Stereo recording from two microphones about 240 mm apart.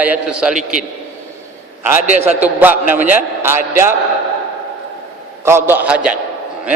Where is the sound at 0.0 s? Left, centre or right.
Centre.